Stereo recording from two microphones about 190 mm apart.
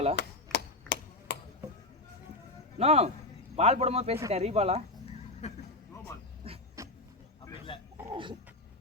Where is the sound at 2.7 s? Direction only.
35° right (ahead or behind).